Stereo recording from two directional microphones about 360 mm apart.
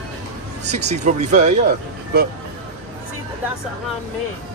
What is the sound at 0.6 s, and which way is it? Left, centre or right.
Speech, centre.